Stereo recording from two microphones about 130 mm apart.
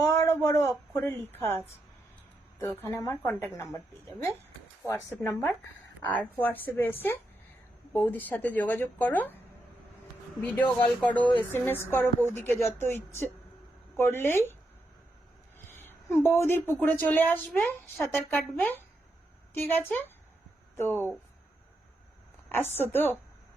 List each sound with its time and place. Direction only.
0.0 s speech: 20° left (ahead or behind)
2.6 s a woman's voice: 20° left (ahead or behind)
5.2 s speech: 15° left (ahead or behind)
10.8 s speech: 10° left (ahead or behind)
15.5 s a woman's voice: 20° left (ahead or behind)
17.6 s a woman's voice: centre (ahead or behind)
18.3 s speech: 15° left (ahead or behind)
22.4 s a woman's voice: 15° left (ahead or behind)